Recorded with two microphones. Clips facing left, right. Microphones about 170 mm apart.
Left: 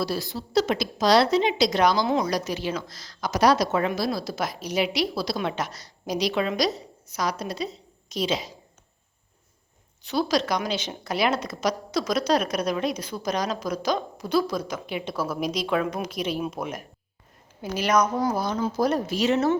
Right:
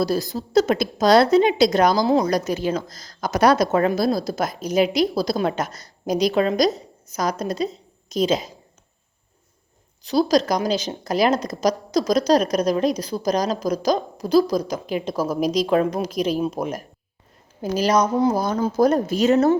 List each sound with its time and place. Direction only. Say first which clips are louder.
0.0 s a woman's voice: right 6 dB; 40° right (ahead or behind)
10.0 s a woman's voice: right 6 dB; 35° right (ahead or behind)
18.3 s a woman's voice: right 5 dB; 40° right (ahead or behind)